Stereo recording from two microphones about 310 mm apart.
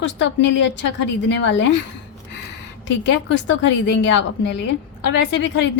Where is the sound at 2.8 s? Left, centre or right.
Left.